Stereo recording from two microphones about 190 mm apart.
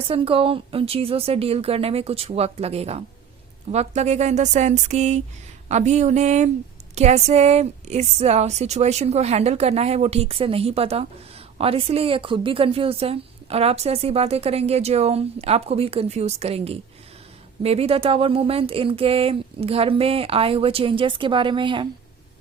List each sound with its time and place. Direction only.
0.1 s a woman's voice: 30° right (ahead or behind)